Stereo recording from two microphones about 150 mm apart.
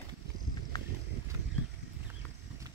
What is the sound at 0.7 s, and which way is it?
Horse, 25° left (ahead or behind).